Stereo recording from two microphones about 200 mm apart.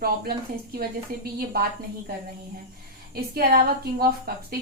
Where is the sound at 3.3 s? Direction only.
50° right (ahead or behind).